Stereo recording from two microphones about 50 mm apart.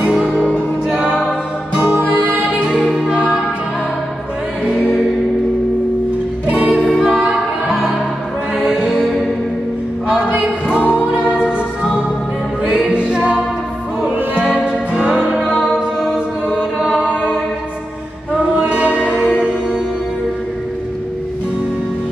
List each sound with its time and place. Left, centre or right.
0.3 s music: centre
0.8 s music: centre
1.9 s music: right
2.4 s music: centre
6.4 s music: right
7.0 s music: centre
8.5 s music: centre
10.2 s music: centre
10.8 s music: left
11.1 s music: centre
12.6 s music: centre
14.4 s music: centre
18.7 s music: right